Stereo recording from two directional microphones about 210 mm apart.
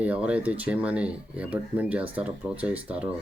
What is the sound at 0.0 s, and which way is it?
Speech, 5° right (ahead or behind).